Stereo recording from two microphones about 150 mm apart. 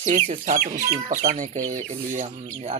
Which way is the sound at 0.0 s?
55° right (ahead or behind).